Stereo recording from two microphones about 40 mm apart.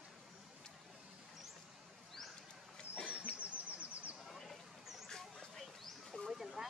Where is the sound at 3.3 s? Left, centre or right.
Right.